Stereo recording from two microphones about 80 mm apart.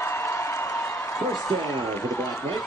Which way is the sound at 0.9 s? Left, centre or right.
Left.